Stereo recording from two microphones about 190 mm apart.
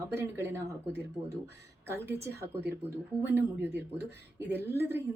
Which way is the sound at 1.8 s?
10° right (ahead or behind).